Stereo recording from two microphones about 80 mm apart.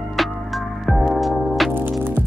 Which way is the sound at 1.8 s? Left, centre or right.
Right.